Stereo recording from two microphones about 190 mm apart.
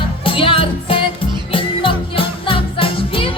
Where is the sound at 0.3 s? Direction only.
30° left (ahead or behind).